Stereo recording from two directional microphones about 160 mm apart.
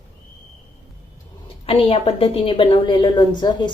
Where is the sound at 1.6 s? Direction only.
35° left (ahead or behind).